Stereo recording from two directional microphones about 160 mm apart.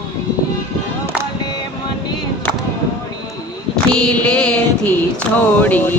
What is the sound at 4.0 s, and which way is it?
Mantra, 5° left (ahead or behind).